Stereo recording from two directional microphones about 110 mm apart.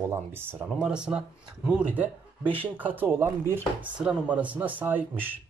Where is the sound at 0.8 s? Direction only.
10° right (ahead or behind).